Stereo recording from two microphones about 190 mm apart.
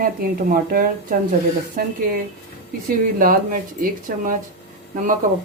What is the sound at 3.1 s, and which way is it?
Speech, 45° right (ahead or behind).